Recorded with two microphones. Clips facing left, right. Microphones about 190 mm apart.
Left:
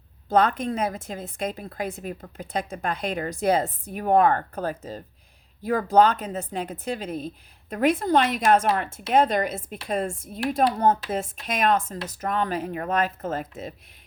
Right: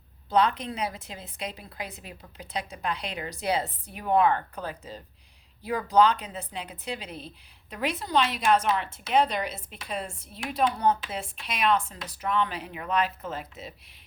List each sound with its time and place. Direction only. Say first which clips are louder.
0.3 s a woman's voice: left 3 dB; 50° left (ahead or behind)